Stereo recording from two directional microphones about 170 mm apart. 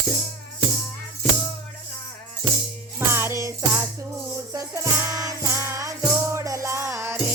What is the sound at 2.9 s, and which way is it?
Music, 15° right (ahead or behind).